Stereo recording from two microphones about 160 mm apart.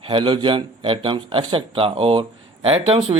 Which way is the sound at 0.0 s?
30° right (ahead or behind).